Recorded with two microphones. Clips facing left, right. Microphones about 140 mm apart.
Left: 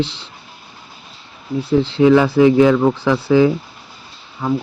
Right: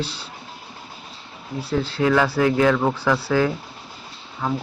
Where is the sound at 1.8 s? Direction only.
20° left (ahead or behind).